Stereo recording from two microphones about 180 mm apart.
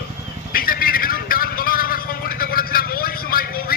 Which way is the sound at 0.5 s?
55° left (ahead or behind).